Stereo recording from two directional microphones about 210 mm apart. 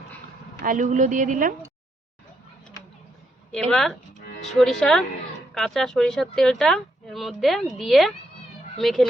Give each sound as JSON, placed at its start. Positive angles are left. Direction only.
{"t": 0.6, "sound": "speech", "side_deg": -40}
{"t": 3.7, "sound": "speech", "side_deg": 5}